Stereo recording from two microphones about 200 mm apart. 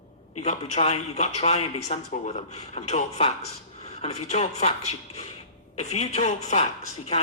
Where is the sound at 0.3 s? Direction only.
35° left (ahead or behind).